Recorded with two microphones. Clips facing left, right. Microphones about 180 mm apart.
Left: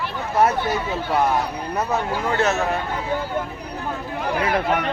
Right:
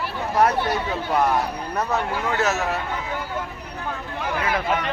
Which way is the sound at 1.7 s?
Centre (ahead or behind).